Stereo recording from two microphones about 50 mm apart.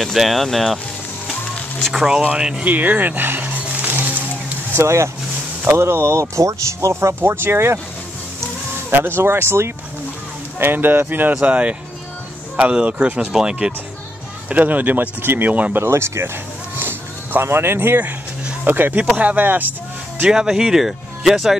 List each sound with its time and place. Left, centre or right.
0.0 s speech: centre
2.3 s speech: centre
2.6 s a sound: right
4.7 s speech: right
5.7 s speech: right
8.9 s speech: right
10.6 s speech: right
11.4 s speech: right
13.3 s speech: centre
14.5 s speech: right
15.8 s speech: right
16.7 s a sound: right
18.6 s speech: right
20.2 s speech: centre